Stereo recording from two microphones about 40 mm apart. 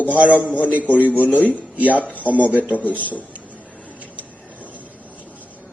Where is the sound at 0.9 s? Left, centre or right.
Left.